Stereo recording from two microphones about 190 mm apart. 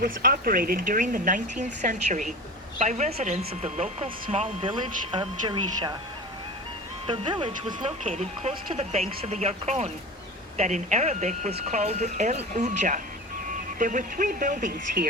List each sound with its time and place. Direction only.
0.0 s speech: 50° right (ahead or behind); by 6.0 s 25° right (ahead or behind)
7.1 s speech: 25° right (ahead or behind)
8.0 s speech: 40° right (ahead or behind)